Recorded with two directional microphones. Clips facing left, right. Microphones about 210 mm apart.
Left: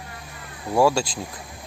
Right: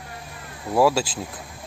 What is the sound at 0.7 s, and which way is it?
Speech, centre (ahead or behind).